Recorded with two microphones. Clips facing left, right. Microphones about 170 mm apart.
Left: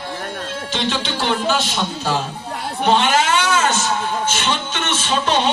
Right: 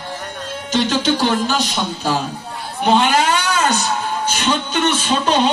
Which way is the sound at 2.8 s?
35° right (ahead or behind).